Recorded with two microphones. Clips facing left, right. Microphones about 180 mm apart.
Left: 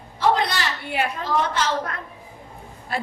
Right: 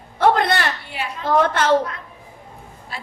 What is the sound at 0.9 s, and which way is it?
Speech, 55° left (ahead or behind).